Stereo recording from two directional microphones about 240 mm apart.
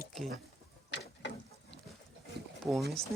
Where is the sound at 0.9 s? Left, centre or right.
Left.